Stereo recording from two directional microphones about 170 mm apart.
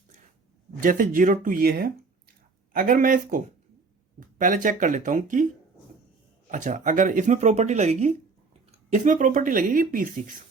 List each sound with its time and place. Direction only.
0.8 s speech: 50° right (ahead or behind)
6.5 s speech: 45° right (ahead or behind)